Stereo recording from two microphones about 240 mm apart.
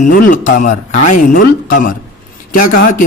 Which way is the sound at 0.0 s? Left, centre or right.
Left.